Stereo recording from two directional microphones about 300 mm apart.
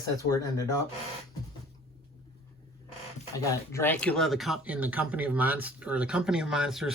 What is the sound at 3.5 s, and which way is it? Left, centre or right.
Speech, centre.